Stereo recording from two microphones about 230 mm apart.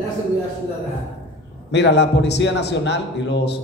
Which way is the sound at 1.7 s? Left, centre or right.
Left.